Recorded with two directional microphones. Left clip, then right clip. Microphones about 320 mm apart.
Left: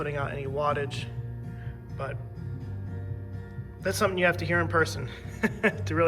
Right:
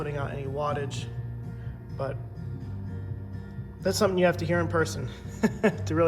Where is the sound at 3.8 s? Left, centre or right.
Centre.